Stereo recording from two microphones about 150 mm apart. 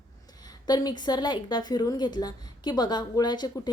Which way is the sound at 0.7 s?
25° left (ahead or behind).